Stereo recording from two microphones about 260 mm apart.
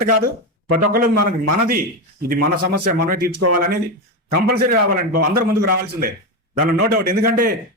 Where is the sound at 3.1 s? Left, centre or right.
Right.